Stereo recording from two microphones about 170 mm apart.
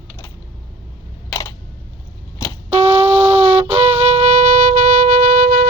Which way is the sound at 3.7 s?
40° right (ahead or behind).